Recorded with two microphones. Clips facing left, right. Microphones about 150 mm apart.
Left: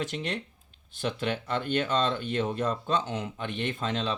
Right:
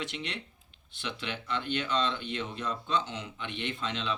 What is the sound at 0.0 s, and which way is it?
Speech, 45° left (ahead or behind).